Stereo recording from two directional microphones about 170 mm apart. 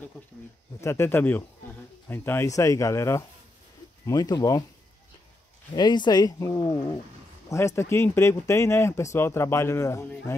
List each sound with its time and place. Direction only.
0.7 s speech: 15° left (ahead or behind)
5.8 s speech: 25° left (ahead or behind)